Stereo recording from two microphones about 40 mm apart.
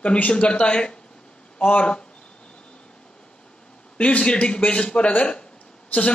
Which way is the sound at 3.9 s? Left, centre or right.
Left.